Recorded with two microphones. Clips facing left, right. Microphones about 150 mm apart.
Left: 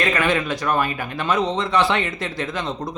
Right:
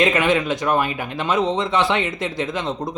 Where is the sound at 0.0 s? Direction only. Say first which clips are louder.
Right 3 dB; 20° right (ahead or behind).